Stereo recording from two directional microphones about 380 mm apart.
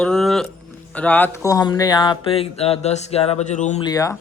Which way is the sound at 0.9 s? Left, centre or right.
Centre.